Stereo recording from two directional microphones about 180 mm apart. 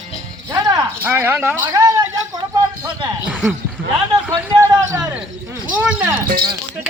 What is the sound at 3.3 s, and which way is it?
Speech, 5° right (ahead or behind).